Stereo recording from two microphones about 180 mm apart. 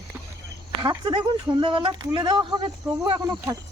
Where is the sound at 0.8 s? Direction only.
25° right (ahead or behind).